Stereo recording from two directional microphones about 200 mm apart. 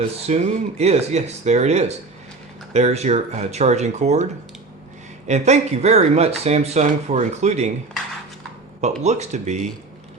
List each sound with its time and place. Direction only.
0.0 s speech: 35° right (ahead or behind)
5.3 s speech: 35° right (ahead or behind)
8.8 s speech: 35° right (ahead or behind)